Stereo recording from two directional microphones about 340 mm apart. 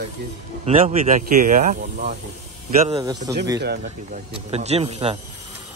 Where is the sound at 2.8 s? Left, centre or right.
Centre.